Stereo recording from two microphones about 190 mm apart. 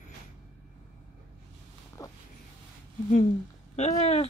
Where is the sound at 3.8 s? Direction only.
35° left (ahead or behind).